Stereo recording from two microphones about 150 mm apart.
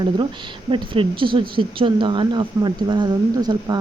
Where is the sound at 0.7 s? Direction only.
35° right (ahead or behind).